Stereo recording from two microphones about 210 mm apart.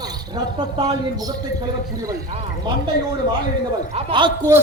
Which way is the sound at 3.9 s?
20° right (ahead or behind).